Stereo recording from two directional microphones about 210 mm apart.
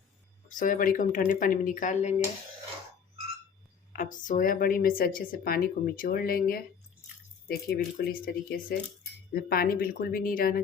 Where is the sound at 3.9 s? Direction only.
40° left (ahead or behind).